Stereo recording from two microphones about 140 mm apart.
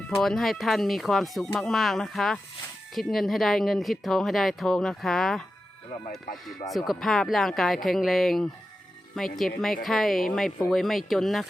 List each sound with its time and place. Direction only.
0.2 s speech: centre (ahead or behind)